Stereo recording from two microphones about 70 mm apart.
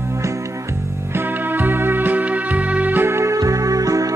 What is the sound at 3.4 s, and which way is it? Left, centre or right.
Music, right.